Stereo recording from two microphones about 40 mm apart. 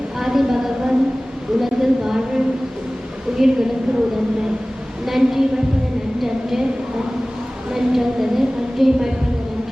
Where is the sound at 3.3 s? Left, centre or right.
Centre.